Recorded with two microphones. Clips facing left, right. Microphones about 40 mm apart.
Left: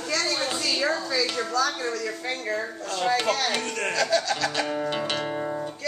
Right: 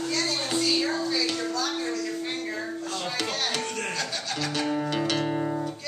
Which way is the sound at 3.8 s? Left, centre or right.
Left.